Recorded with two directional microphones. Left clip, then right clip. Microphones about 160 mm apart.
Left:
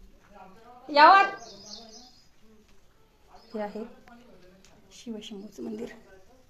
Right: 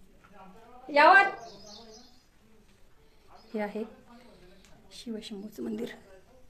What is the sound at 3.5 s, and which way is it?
Speech, 25° right (ahead or behind).